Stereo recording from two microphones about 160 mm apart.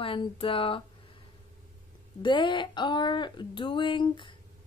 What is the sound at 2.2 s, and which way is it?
Speech, 30° left (ahead or behind).